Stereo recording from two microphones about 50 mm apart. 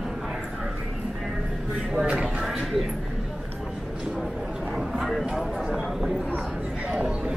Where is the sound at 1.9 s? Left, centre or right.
Right.